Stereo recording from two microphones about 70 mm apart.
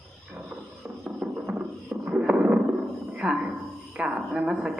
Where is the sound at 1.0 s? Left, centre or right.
Centre.